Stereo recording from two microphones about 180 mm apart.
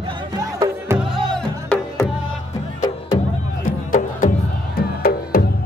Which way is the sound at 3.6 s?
45° left (ahead or behind).